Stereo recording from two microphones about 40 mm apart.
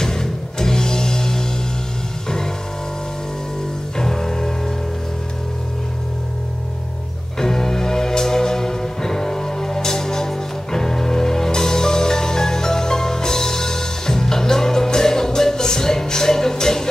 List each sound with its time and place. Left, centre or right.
0.0 s music: centre
4.0 s music: centre
7.3 s music: centre